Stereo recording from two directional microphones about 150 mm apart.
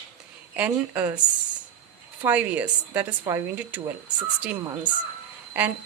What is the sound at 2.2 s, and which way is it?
Speech, 10° right (ahead or behind).